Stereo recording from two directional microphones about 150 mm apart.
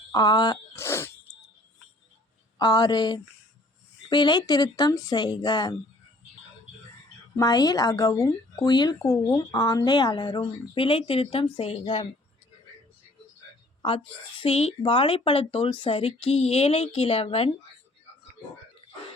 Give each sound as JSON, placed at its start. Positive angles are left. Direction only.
{"t": 0.1, "sound": "speech", "side_deg": 30}
{"t": 0.8, "sound": "speech", "side_deg": 15}
{"t": 2.6, "sound": "speech", "side_deg": 25}
{"t": 7.3, "sound": "speech", "side_deg": 25}
{"t": 13.8, "sound": "speech", "side_deg": 35}